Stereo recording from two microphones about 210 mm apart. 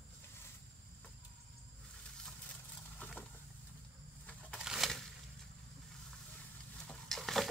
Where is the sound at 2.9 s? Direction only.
5° left (ahead or behind).